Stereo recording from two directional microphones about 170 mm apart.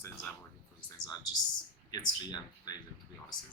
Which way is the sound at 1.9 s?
25° left (ahead or behind).